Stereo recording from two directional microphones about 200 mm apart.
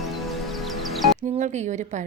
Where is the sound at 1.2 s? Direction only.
35° right (ahead or behind).